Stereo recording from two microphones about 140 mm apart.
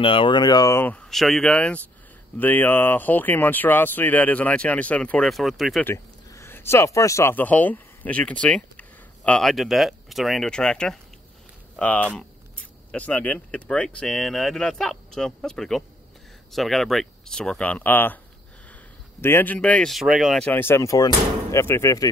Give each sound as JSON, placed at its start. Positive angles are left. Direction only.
{"t": 0.0, "sound": "speech", "side_deg": 40}
{"t": 5.9, "sound": "speech", "side_deg": 15}
{"t": 19.2, "sound": "speech", "side_deg": 15}
{"t": 20.4, "sound": "speech", "side_deg": 15}